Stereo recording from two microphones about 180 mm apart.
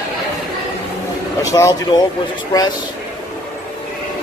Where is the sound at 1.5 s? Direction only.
20° left (ahead or behind).